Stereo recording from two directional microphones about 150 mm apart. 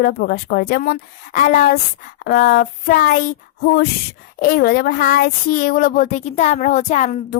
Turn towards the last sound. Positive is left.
turn(degrees=50)  # may be behind; listen again after turning